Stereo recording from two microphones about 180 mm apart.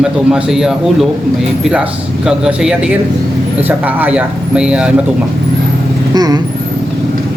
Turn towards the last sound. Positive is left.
turn(degrees=-20)  # may be behind; listen again after turning